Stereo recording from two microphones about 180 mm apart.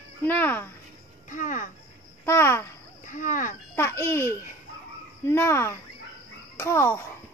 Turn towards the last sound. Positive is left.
turn(degrees=15)  # may be behind; listen again after turning